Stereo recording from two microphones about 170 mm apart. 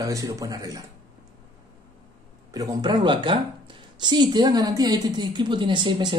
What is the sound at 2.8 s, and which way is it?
Speech, 25° right (ahead or behind).